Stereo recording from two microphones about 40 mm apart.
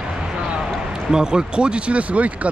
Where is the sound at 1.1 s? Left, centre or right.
Right.